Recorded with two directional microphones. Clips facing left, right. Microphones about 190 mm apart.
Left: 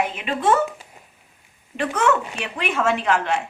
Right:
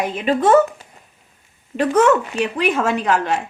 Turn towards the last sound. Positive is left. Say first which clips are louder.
# right 2 dB
turn(degrees=-40)  # may be behind; listen again after turning